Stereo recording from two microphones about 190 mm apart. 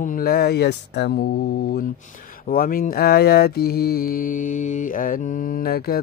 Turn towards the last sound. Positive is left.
turn(degrees=55)  # may be behind; listen again after turning